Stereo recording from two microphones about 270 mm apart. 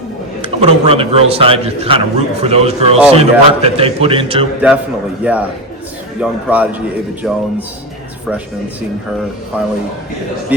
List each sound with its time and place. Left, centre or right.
0.4 s a man's voice: right
5.2 s a man's voice: centre
9.5 s a man's voice: centre